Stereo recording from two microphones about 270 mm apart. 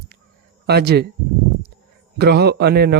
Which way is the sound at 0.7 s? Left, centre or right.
Right.